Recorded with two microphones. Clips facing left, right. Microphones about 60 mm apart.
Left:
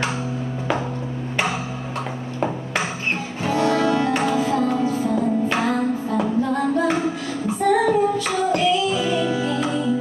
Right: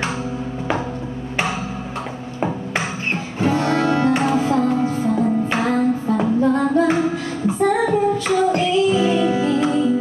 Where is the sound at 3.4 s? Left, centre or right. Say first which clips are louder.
Right 1 dB; right.